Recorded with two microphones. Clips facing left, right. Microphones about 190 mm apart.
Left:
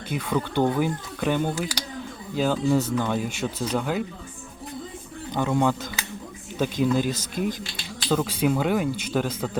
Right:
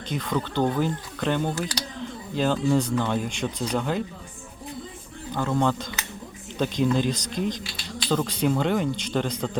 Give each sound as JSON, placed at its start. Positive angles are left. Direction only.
{"t": 0.1, "sound": "speech", "side_deg": 10}
{"t": 5.3, "sound": "speech", "side_deg": 15}